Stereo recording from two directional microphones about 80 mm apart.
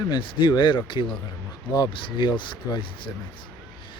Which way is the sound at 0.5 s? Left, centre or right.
Left.